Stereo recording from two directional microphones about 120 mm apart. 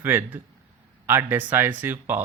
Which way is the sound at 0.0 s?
15° right (ahead or behind).